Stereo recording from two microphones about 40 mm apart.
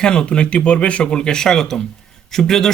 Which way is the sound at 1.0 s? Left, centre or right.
Centre.